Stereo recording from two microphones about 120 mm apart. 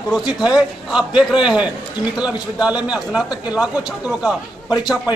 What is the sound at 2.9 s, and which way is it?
Speech, 5° right (ahead or behind).